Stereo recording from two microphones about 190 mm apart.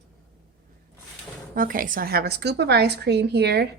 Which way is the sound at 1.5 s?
45° right (ahead or behind).